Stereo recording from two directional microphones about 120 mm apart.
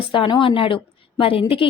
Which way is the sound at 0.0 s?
45° left (ahead or behind).